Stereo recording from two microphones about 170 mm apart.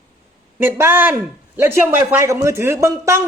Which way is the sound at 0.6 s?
10° right (ahead or behind).